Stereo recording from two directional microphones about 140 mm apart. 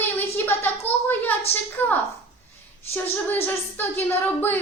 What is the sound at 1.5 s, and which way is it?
Speech, 45° left (ahead or behind).